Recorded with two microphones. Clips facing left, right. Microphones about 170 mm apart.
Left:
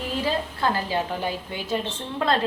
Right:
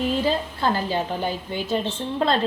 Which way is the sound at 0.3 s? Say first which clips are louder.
Right 2 dB; 30° right (ahead or behind).